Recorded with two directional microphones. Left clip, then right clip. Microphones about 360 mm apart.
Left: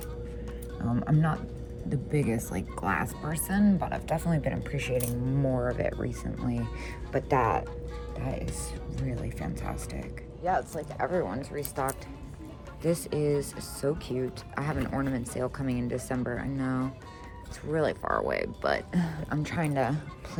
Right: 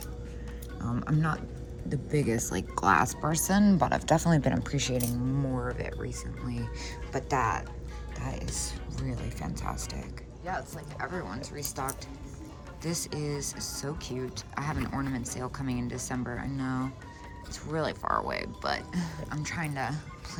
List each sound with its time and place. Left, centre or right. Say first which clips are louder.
0.8 s speech: left 2 dB; centre
11.1 s speech: left 7 dB; centre